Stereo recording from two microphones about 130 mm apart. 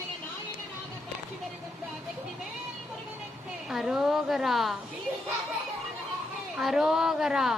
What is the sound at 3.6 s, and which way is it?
A woman's voice, 5° right (ahead or behind).